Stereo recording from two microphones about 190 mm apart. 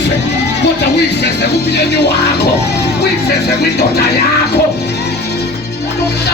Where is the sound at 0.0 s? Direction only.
65° left (ahead or behind).